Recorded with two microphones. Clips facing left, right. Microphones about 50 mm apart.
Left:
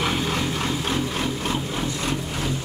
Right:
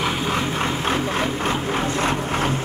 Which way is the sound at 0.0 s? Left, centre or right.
Centre.